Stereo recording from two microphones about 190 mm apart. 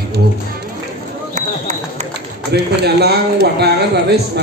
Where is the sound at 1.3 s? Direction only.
40° right (ahead or behind).